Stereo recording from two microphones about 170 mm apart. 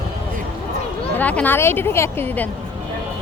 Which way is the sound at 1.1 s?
10° left (ahead or behind).